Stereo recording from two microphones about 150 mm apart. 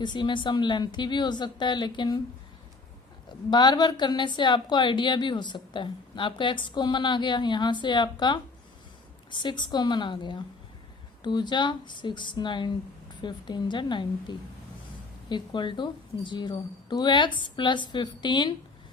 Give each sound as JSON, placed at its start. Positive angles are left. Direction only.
{"t": 0.0, "sound": "a woman's voice", "side_deg": 30}
{"t": 3.5, "sound": "a woman's voice", "side_deg": 30}